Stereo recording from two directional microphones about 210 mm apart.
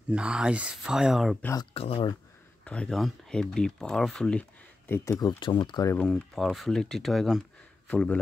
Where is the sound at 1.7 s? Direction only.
25° left (ahead or behind).